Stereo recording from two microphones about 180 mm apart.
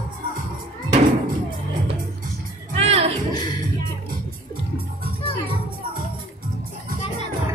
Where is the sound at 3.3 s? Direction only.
25° left (ahead or behind).